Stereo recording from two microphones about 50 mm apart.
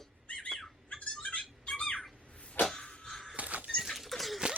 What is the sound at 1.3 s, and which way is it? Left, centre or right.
Music, left.